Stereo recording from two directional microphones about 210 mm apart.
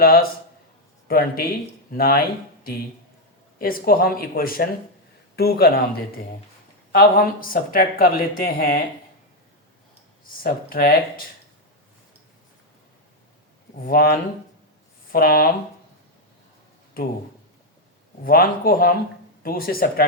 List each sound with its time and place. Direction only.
0.0 s speech: 45° left (ahead or behind)
3.6 s speech: 45° left (ahead or behind)
10.2 s speech: 45° left (ahead or behind)
13.8 s speech: 45° left (ahead or behind)
18.3 s speech: 45° left (ahead or behind)